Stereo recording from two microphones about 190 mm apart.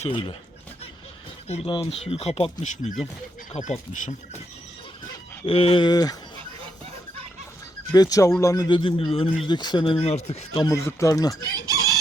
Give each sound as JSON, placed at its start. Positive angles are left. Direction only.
{"t": 0.0, "sound": "speech", "side_deg": 30}
{"t": 1.5, "sound": "speech", "side_deg": 30}
{"t": 5.5, "sound": "speech", "side_deg": 30}
{"t": 7.9, "sound": "speech", "side_deg": 20}
{"t": 10.8, "sound": "speech", "side_deg": 15}
{"t": 11.7, "sound": "chicken", "side_deg": -20}